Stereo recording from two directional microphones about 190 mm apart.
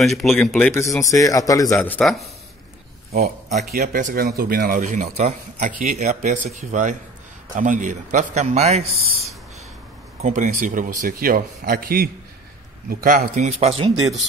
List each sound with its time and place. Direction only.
0.0 s speech: centre (ahead or behind); by 1.8 s 15° left (ahead or behind)
1.8 s speech: centre (ahead or behind)
3.1 s a man's voice: 40° right (ahead or behind)
10.2 s a man's voice: 40° right (ahead or behind)